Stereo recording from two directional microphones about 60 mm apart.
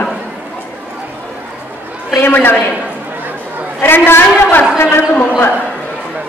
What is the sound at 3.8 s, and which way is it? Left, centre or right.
Speech, left.